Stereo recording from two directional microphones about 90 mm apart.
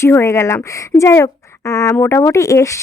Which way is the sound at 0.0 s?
30° left (ahead or behind).